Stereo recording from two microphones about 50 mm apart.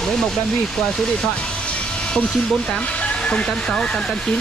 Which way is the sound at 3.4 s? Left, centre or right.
Centre.